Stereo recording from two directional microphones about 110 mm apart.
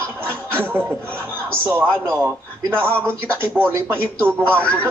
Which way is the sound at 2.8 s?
10° left (ahead or behind).